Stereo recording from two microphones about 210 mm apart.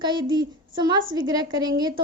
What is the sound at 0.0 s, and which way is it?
A woman's voice, 20° right (ahead or behind).